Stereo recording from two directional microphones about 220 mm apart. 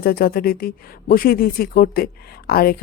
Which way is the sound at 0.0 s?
45° left (ahead or behind).